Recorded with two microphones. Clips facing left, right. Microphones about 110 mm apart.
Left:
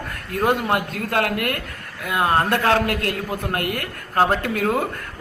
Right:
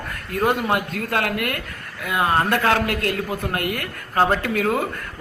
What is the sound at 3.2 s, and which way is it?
Speech, centre (ahead or behind).